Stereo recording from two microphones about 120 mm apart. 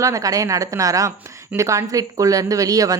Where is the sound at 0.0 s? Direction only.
30° right (ahead or behind).